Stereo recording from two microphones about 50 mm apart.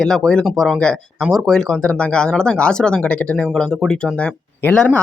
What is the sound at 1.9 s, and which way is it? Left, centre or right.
Speech, left.